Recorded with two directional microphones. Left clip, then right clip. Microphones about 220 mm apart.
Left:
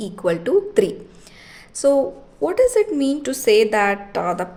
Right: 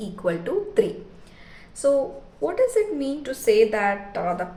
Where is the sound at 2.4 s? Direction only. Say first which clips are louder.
Left 5 dB; 50° left (ahead or behind).